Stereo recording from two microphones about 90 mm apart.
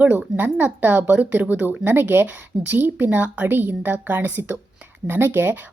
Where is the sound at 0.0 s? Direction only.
20° right (ahead or behind).